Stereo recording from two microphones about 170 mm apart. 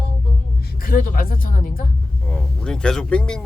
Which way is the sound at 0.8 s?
60° left (ahead or behind).